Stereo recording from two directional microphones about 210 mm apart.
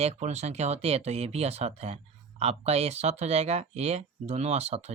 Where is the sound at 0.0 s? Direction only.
30° right (ahead or behind).